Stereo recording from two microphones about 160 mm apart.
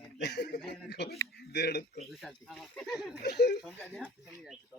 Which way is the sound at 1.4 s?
85° left.